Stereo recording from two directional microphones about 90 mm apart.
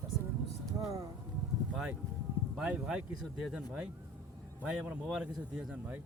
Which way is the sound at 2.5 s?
15° right (ahead or behind).